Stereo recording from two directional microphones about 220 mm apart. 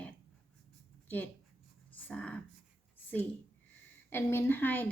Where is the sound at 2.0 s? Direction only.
5° left (ahead or behind).